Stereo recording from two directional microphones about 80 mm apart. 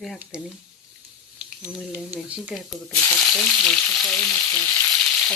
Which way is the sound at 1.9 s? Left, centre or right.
Right.